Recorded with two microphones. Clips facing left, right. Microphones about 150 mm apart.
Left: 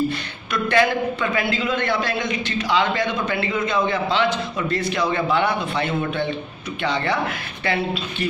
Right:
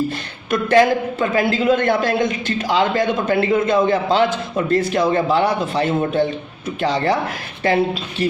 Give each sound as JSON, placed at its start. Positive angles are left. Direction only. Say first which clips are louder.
{"t": 0.5, "sound": "a man's voice", "louder": "right 5 dB", "side_deg": -45}